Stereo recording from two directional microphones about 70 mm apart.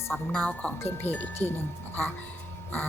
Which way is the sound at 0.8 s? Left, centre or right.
Left.